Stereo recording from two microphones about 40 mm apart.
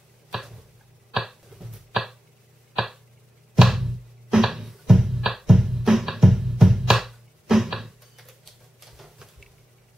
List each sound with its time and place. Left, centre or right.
0.3 s tick-tock: centre
2.8 s a sound: centre
3.6 s music: centre
6.9 s computer keyboard: centre